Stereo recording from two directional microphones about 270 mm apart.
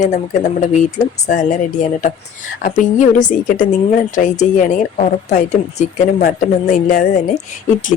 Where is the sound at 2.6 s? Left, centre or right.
Left.